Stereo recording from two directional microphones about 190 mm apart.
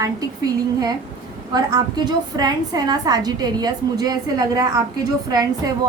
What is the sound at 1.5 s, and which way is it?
A woman's voice, 20° right (ahead or behind).